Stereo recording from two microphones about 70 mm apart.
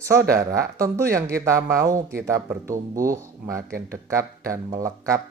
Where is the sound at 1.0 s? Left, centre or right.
Right.